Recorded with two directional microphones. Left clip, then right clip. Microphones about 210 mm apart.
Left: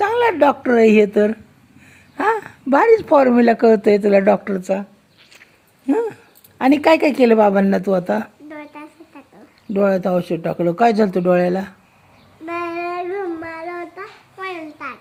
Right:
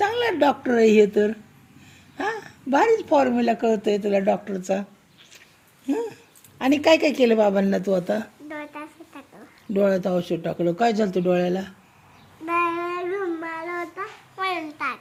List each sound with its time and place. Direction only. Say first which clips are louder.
0.0 s speech: left 6 dB; 10° left (ahead or behind)
5.8 s dog: left 7 dB; 20° left (ahead or behind)
6.6 s a woman's voice: left 4 dB; 20° left (ahead or behind)
12.5 s child singing: right 1 dB; 10° left (ahead or behind)
14.3 s a sound: right 2 dB; 5° right (ahead or behind)